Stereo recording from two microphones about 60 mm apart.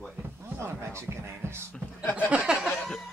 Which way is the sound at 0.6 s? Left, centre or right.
Right.